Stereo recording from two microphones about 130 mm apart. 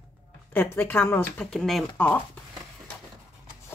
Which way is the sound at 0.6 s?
15° left (ahead or behind).